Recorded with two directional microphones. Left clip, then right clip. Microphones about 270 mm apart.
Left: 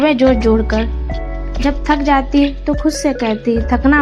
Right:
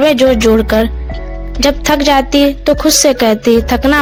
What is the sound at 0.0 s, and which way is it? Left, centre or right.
A woman's voice, right.